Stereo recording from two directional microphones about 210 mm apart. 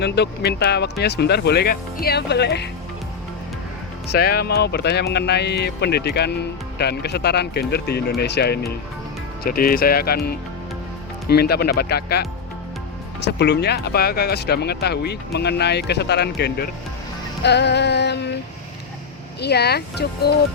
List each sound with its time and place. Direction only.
0.0 s speech: 50° left (ahead or behind)
4.1 s speech: 50° left (ahead or behind)
13.2 s speech: 55° left (ahead or behind)
19.4 s speech: 50° left (ahead or behind)